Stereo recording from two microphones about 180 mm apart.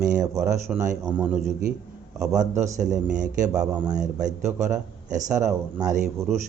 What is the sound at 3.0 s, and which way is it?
Speech, 5° right (ahead or behind).